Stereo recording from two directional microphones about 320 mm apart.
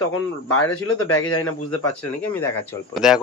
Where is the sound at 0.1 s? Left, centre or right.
Left.